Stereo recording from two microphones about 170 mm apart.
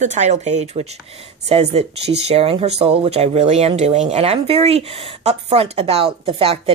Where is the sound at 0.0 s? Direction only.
45° right (ahead or behind).